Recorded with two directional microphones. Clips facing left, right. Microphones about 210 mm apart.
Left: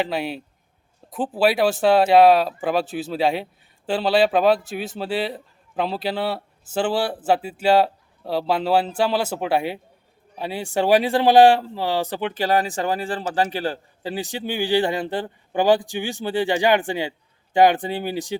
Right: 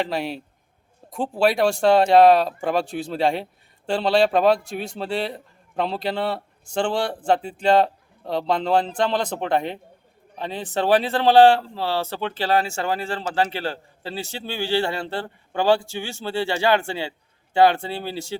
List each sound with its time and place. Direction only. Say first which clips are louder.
0.0 s a man's voice: left 1 dB; centre (ahead or behind)